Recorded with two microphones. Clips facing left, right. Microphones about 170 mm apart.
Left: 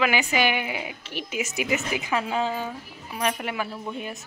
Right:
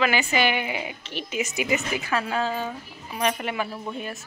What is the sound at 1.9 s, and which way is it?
Speech, 15° left (ahead or behind).